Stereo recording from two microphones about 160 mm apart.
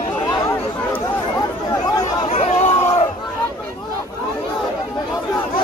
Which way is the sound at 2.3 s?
40° left (ahead or behind).